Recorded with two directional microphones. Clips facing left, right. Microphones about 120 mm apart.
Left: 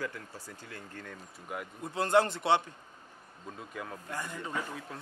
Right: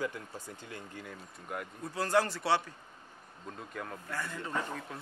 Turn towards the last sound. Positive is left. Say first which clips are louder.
# even
turn(degrees=15)  # may be behind; listen again after turning